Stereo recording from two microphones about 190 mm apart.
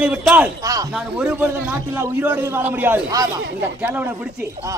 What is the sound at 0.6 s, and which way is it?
Speech, 20° right (ahead or behind).